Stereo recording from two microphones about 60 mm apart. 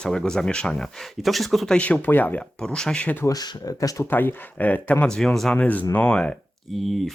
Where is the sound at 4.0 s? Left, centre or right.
Left.